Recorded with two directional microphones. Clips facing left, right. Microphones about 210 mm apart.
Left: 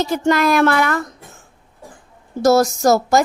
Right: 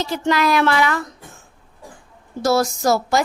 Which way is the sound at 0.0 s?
50° left (ahead or behind).